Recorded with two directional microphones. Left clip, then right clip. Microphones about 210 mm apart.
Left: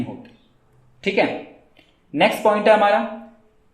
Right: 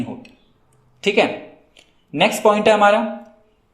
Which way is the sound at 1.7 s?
30° right (ahead or behind).